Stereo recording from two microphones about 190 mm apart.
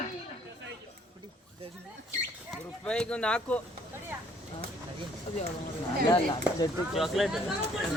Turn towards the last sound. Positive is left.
turn(degrees=0)  # may be behind; listen again after turning